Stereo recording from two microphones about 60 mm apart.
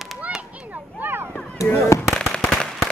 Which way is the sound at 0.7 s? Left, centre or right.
Right.